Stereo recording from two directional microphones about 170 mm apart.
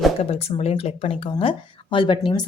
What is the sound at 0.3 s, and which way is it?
Speech, 35° left (ahead or behind).